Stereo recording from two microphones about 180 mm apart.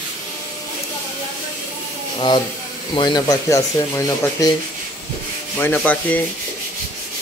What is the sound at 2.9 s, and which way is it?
Speech, 20° left (ahead or behind).